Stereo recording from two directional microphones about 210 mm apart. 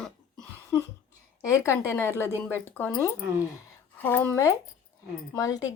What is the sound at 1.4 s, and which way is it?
Speech, 15° left (ahead or behind).